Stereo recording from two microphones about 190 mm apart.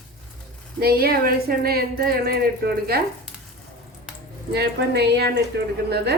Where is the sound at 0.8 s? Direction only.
55° right (ahead or behind).